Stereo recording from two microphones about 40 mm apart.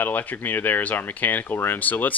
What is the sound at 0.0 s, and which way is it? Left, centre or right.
Speech, left.